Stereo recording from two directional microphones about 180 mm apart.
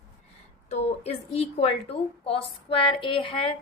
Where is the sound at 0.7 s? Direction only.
35° left (ahead or behind).